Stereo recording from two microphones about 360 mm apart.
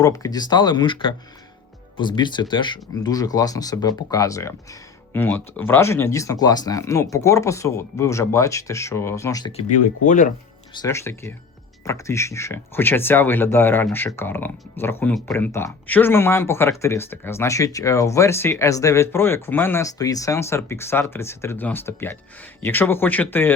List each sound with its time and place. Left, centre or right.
0.0 s speech: centre
10.8 s speech: centre